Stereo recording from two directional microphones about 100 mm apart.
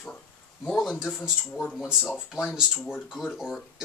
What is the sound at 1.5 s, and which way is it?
Speech, 10° left (ahead or behind).